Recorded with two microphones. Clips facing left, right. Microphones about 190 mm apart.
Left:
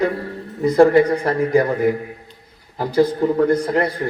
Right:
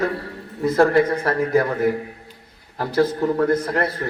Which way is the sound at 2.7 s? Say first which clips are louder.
Left 3 dB; 15° left (ahead or behind).